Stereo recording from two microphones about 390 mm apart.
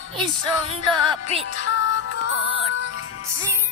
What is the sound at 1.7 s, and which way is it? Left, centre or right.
Music, left.